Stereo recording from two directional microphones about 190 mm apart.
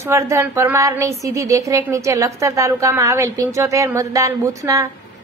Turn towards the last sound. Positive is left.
turn(degrees=-15)  # may be behind; listen again after turning